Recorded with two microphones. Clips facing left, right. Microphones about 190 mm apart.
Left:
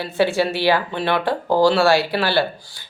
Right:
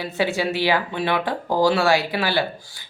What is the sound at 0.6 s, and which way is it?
Speech, 60° left (ahead or behind).